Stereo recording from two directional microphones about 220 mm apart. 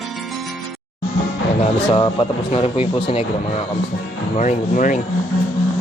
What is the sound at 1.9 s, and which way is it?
Speech, 25° left (ahead or behind).